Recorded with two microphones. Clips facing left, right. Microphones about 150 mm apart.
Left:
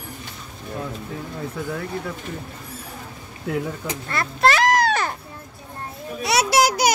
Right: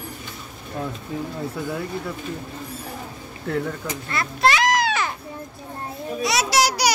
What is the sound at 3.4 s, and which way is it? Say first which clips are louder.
Speech: even; 10° left (ahead or behind).